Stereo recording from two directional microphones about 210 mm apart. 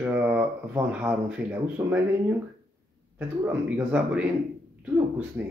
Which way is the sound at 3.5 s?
10° right (ahead or behind).